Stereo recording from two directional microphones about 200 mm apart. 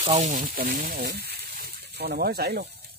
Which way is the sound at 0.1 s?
40° right (ahead or behind).